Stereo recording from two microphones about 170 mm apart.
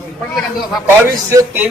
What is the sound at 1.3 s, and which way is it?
Speech, 15° right (ahead or behind).